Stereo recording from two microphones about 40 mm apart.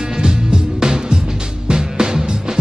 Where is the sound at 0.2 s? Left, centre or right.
Right.